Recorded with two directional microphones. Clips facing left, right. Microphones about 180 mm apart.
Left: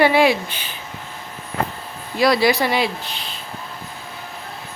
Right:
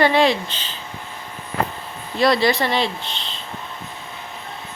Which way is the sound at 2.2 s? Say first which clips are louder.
Left 1 dB; 5° left (ahead or behind).